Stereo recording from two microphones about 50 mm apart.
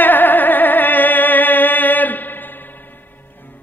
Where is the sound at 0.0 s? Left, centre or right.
Left.